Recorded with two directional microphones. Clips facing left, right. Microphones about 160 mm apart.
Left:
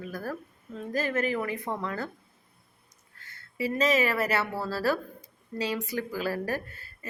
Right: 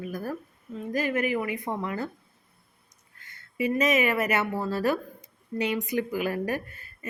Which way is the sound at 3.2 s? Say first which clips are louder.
Right 3 dB; 20° right (ahead or behind).